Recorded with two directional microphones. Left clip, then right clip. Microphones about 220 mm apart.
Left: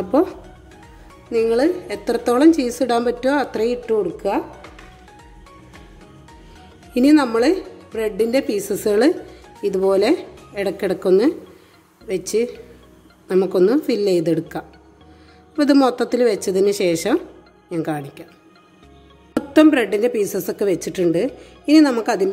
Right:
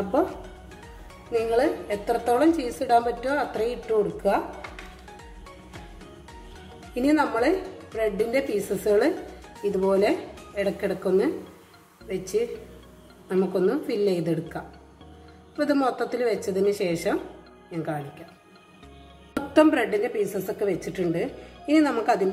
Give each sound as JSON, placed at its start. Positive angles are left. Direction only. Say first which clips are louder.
{"t": 1.3, "sound": "a woman's voice", "louder": "left 6 dB", "side_deg": 50}
{"t": 6.9, "sound": "a woman's voice", "louder": "left 7 dB", "side_deg": 50}
{"t": 19.5, "sound": "a woman's voice", "louder": "left 5 dB", "side_deg": 35}